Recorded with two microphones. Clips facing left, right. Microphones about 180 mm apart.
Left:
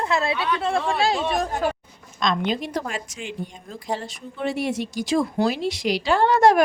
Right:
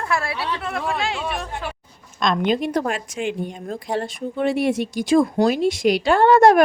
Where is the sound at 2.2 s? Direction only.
50° right (ahead or behind).